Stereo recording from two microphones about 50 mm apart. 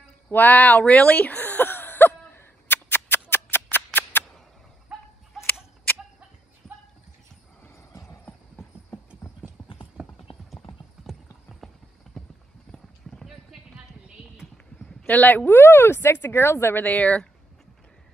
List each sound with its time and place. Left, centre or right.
0.3 s a sound: left
4.9 s a sound: right
7.7 s clip-clop: left
10.0 s clip-clop: centre
11.1 s clip-clop: centre
13.2 s clip-clop: centre
15.0 s speech: left
15.4 s speech: left
16.7 s speech: left